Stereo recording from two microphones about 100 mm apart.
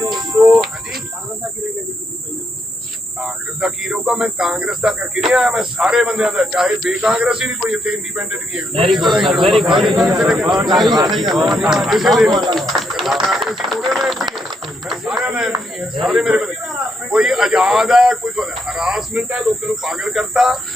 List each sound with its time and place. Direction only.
0.5 s cricket: centre (ahead or behind)
3.2 s a man's voice: 5° right (ahead or behind)
10.8 s speech: 45° right (ahead or behind)
11.1 s a man's voice: centre (ahead or behind)